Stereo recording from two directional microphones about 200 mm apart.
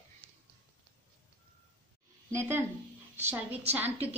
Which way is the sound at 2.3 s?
10° right (ahead or behind).